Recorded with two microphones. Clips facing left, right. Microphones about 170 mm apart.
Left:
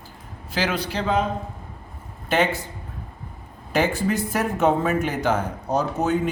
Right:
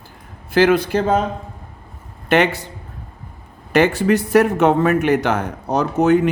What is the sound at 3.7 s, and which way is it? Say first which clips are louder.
Speech: right 7 dB; 75° right (ahead or behind).